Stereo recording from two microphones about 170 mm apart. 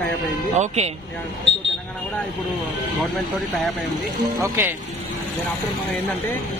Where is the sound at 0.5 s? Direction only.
40° right (ahead or behind).